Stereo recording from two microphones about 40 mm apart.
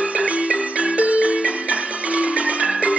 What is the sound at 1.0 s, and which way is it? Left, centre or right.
Music, right.